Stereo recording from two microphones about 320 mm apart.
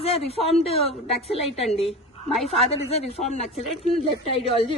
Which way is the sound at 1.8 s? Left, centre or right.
Centre.